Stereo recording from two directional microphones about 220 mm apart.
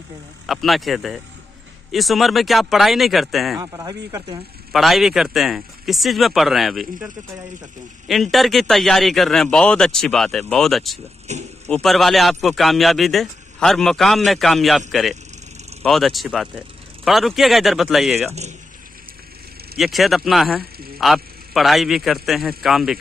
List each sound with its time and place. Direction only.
0.5 s speech: centre (ahead or behind)
3.5 s speech: 15° right (ahead or behind)
4.7 s speech: centre (ahead or behind)
8.1 s speech: centre (ahead or behind)
11.3 s speech: 30° right (ahead or behind)
11.7 s speech: centre (ahead or behind)
19.8 s speech: centre (ahead or behind)